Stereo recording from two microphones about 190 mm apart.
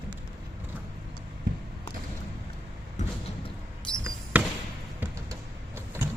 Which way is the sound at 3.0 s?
40° left (ahead or behind).